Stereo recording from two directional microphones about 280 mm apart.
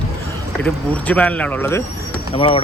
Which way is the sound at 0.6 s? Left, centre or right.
Centre.